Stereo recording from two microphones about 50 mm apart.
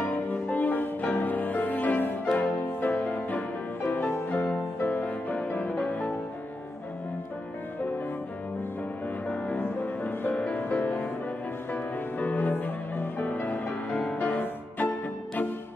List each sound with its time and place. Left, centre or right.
0.0 s music: left
10.5 s music: left